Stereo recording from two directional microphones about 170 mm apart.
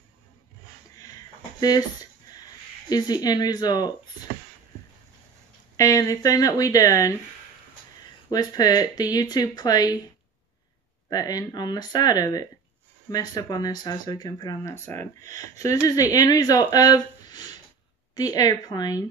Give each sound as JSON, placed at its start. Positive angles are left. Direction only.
{"t": 1.6, "sound": "speech", "side_deg": 20}
{"t": 2.9, "sound": "speech", "side_deg": 20}
{"t": 5.8, "sound": "speech", "side_deg": 20}
{"t": 8.3, "sound": "speech", "side_deg": 25}
{"t": 11.1, "sound": "speech", "side_deg": 20}